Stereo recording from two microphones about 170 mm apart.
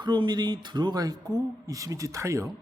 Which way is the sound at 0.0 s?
25° right (ahead or behind).